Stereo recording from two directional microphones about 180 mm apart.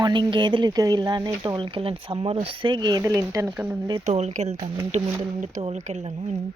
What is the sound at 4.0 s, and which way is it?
Speech, 40° right (ahead or behind).